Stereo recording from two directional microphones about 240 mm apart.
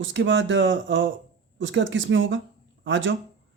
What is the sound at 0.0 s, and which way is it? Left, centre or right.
A man's voice, right.